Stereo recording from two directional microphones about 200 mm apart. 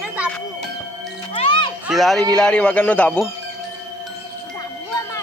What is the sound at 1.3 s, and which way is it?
Music, 25° left (ahead or behind).